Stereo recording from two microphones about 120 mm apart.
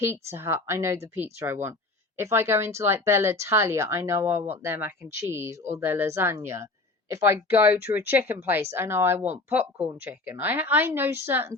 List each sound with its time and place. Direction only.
0.0 s speech: 20° right (ahead or behind)